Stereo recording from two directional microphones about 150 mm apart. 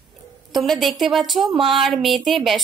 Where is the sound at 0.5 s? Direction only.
Centre (ahead or behind).